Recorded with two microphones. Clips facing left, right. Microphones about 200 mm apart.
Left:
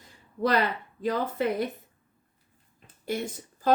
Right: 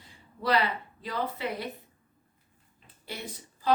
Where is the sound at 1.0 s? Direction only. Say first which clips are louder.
Left 6 dB; 45° left (ahead or behind).